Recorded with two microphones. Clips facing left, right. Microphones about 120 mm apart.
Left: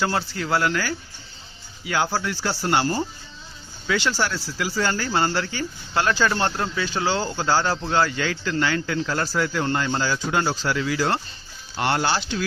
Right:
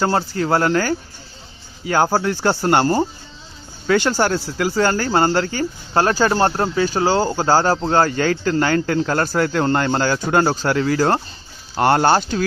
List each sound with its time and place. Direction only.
0.0 s speech: 40° right (ahead or behind)